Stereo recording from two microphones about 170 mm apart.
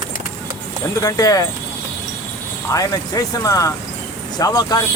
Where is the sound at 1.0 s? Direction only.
20° left (ahead or behind).